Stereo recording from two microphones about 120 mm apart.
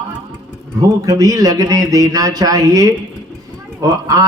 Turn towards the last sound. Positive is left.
turn(degrees=-30)  # may be behind; listen again after turning